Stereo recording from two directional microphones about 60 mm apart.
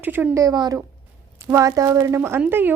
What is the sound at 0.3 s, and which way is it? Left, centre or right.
A woman's voice, right.